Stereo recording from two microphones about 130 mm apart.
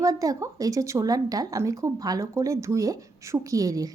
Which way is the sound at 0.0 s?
25° right (ahead or behind).